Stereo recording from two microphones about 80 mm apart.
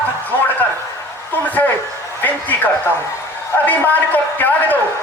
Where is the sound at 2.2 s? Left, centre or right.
Left.